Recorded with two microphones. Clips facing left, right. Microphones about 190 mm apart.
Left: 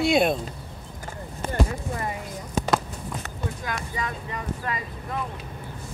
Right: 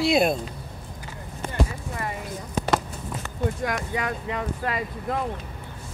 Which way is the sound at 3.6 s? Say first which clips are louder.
Right 4 dB; 65° right (ahead or behind).